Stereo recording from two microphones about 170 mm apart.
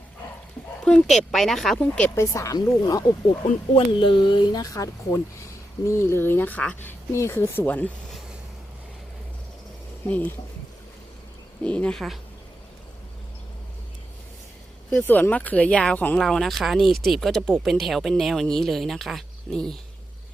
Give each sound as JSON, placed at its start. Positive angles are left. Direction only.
{"t": 0.9, "sound": "speech", "side_deg": 0}
{"t": 2.1, "sound": "speech", "side_deg": 15}
{"t": 3.4, "sound": "speech", "side_deg": 35}
{"t": 10.1, "sound": "speech", "side_deg": 10}
{"t": 11.6, "sound": "speech", "side_deg": 5}
{"t": 14.8, "sound": "speech", "side_deg": 5}